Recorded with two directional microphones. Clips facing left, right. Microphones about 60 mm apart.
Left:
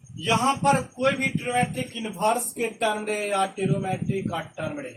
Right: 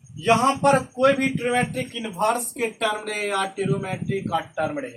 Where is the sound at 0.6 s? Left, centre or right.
Right.